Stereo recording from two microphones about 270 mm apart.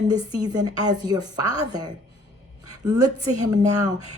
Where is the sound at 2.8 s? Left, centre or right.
Centre.